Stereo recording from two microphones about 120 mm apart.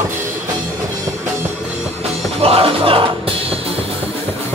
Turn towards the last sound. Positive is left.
turn(degrees=-50)  # may be behind; listen again after turning